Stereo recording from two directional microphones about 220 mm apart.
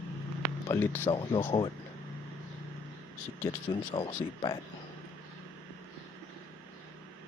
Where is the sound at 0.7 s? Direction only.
10° left (ahead or behind).